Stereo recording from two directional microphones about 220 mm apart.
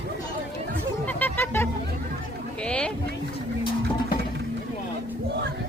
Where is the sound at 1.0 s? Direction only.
5° left (ahead or behind).